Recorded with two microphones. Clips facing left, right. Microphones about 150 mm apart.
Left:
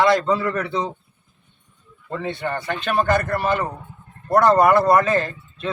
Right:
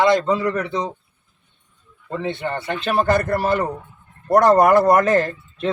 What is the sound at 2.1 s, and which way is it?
Speech, 25° right (ahead or behind).